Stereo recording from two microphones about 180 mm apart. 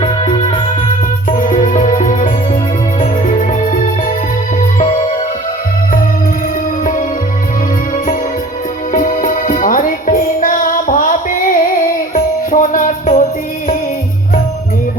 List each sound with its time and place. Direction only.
0.0 s music: 35° left (ahead or behind)
1.4 s music: 45° left (ahead or behind)
4.8 s music: 40° left (ahead or behind)
8.9 s music: 50° left (ahead or behind)